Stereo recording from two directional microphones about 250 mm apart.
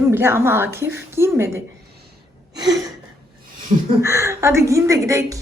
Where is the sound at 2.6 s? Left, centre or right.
Centre.